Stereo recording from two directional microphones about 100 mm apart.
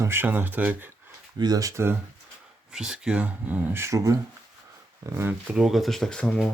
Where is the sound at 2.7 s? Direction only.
5° right (ahead or behind); by 5.4 s 25° right (ahead or behind).